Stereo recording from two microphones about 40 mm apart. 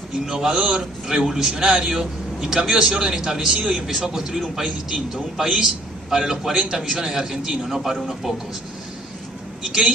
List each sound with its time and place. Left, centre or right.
0.3 s a man's voice: centre
3.8 s a man's voice: centre
9.7 s a man's voice: centre